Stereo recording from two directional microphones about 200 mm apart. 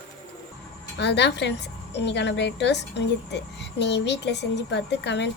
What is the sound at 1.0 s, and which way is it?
A woman's voice, 60° left (ahead or behind).